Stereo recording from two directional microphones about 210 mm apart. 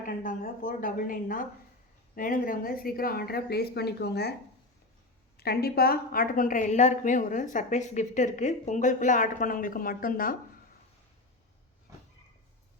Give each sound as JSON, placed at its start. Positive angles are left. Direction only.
{"t": 0.0, "sound": "a woman's voice", "side_deg": 40}
{"t": 5.4, "sound": "a woman's voice", "side_deg": 50}